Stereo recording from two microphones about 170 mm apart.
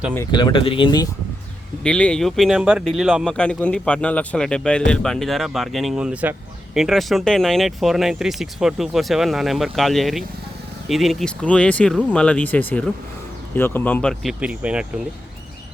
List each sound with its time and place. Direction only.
0.3 s speech: 25° left (ahead or behind)
1.8 s speech: 5° left (ahead or behind)